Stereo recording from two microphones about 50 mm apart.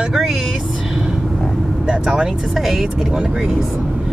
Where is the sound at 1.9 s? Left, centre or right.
Centre.